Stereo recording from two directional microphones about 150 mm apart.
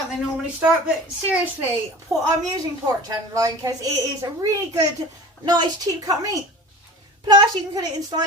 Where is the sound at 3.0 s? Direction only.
25° right (ahead or behind).